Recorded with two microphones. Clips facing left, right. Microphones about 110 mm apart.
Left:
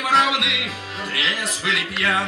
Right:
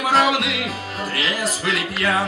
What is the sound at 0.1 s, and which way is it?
Music, centre (ahead or behind).